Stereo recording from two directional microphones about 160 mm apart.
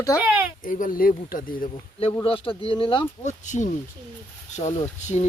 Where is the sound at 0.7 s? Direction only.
55° left (ahead or behind).